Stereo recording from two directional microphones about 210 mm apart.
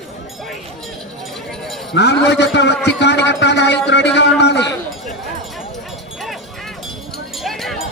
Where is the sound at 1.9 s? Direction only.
55° left (ahead or behind).